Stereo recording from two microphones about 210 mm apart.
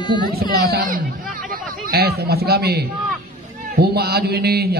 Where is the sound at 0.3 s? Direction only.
45° right (ahead or behind).